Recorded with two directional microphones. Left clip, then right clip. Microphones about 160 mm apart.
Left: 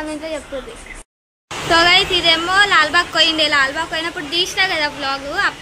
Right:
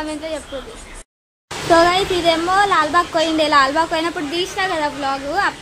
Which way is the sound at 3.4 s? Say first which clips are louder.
Right 2 dB; 45° right (ahead or behind).